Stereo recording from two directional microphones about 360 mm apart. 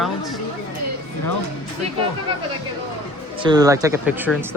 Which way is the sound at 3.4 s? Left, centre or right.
Centre.